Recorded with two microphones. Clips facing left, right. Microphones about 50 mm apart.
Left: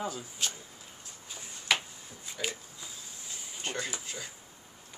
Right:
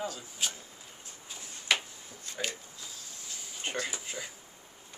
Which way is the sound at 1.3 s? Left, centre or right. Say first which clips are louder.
Even; centre.